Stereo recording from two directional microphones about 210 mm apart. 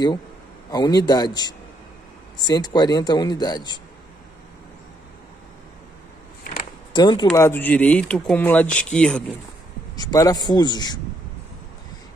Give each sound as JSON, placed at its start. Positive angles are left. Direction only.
{"t": 0.7, "sound": "speech", "side_deg": 20}
{"t": 6.9, "sound": "speech", "side_deg": 20}
{"t": 9.9, "sound": "speech", "side_deg": 15}